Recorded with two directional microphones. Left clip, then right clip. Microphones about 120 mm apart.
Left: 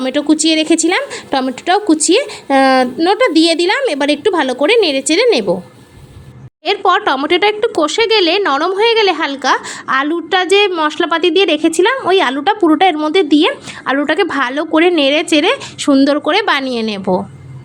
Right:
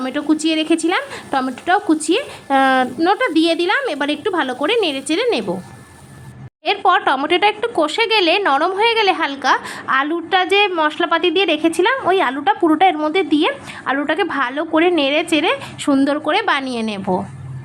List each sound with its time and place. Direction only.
0.1 s speech: 35° left (ahead or behind)
6.7 s speech: 35° left (ahead or behind)